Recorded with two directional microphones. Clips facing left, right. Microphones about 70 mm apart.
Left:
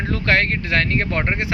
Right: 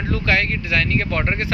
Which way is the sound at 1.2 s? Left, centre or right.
Centre.